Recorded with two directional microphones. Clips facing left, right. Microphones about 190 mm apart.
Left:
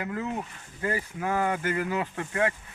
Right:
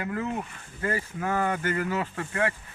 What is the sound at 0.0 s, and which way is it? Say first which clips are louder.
Speech: right 1 dB; 20° left (ahead or behind).